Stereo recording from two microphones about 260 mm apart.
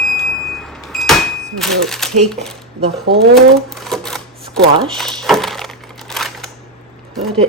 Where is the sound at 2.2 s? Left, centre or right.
Centre.